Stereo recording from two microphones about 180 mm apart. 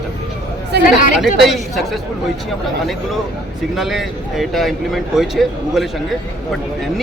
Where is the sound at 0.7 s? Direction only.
70° right (ahead or behind).